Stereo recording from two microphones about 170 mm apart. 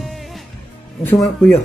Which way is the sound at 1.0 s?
20° left (ahead or behind).